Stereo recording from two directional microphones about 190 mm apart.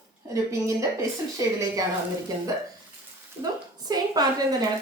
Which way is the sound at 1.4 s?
15° right (ahead or behind).